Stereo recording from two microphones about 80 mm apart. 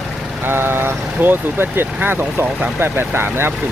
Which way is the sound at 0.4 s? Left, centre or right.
Right.